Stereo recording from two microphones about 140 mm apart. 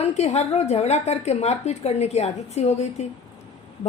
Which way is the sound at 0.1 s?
50° left (ahead or behind).